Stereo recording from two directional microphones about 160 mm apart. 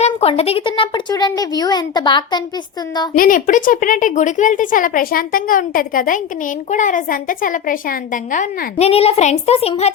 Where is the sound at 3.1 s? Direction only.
60° left (ahead or behind).